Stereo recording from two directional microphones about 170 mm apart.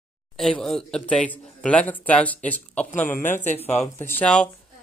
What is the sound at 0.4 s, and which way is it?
Speech, 5° left (ahead or behind).